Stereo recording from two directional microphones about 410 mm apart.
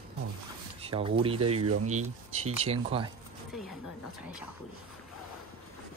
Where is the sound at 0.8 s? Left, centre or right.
Centre.